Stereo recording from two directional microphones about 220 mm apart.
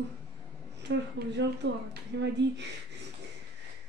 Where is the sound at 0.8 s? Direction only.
50° right (ahead or behind).